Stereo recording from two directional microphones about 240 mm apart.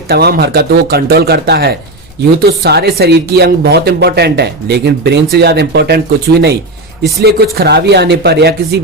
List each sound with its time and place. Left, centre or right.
0.1 s speech: right